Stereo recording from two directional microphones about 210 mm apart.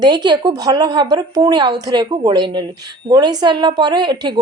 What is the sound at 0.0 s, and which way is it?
A woman's voice, 20° right (ahead or behind).